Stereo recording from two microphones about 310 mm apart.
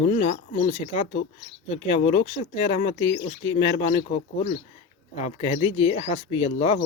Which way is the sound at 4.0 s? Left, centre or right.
Left.